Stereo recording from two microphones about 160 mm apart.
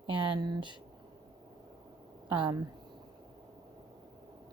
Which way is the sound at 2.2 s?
30° right (ahead or behind).